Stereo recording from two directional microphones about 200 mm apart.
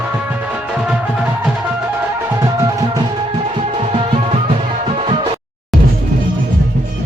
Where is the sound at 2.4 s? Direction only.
20° right (ahead or behind).